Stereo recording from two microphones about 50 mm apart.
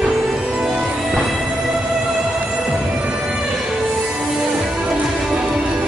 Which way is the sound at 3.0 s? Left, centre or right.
Right.